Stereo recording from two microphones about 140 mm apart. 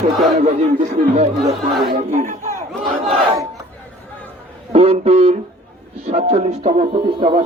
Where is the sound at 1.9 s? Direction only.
70° right (ahead or behind).